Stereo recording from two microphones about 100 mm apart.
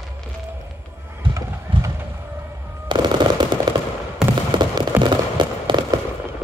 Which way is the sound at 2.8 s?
50° right (ahead or behind).